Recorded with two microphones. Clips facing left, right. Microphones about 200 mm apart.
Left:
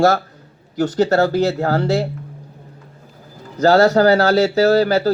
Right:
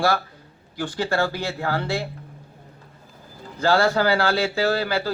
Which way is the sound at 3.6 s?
40° left (ahead or behind).